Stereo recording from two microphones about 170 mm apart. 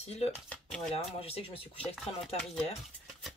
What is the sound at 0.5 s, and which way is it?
Speech, 5° left (ahead or behind).